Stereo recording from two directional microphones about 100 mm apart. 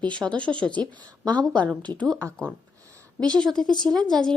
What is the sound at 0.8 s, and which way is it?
A woman's voice, 45° right (ahead or behind).